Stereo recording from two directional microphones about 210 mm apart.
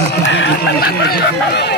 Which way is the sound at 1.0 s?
50° left (ahead or behind).